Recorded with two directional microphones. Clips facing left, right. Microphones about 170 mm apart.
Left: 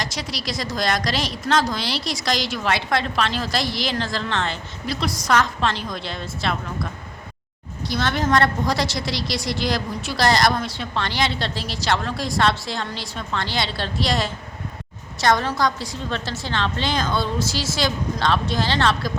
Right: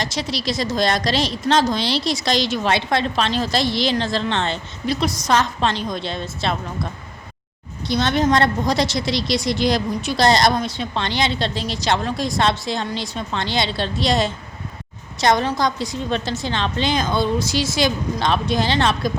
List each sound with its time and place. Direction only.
0.0 s a woman's voice: 25° right (ahead or behind)
7.9 s a woman's voice: 20° right (ahead or behind)